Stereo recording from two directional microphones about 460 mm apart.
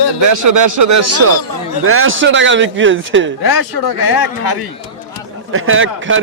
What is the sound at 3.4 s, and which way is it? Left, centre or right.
Speech, left.